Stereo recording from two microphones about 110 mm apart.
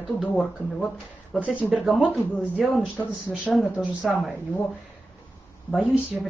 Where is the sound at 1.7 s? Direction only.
Centre (ahead or behind).